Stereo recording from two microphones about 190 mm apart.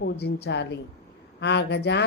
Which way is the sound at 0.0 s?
60° left (ahead or behind).